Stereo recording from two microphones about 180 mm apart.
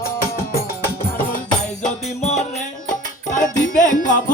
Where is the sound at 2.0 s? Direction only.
35° left (ahead or behind).